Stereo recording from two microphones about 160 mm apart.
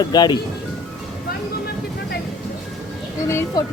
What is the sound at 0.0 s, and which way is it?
Speech, 25° left (ahead or behind).